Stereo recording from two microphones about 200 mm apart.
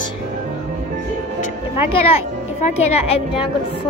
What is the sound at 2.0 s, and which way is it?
Speech, 30° left (ahead or behind).